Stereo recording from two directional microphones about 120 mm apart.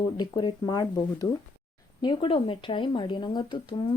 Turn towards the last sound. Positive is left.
turn(degrees=40)  # may be behind; listen again after turning